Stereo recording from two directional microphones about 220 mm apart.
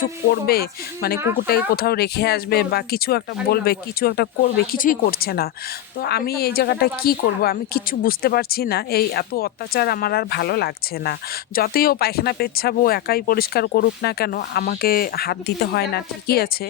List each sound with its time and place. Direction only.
0.3 s speech: 45° left (ahead or behind)